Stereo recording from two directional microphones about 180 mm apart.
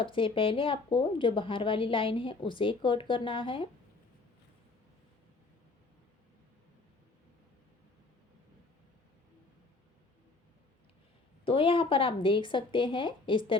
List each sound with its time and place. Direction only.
0.0 s speech: 30° left (ahead or behind)
11.4 s speech: 30° left (ahead or behind)